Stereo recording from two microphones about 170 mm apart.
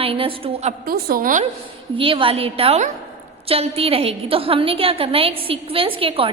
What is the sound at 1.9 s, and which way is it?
A woman's voice, 30° right (ahead or behind).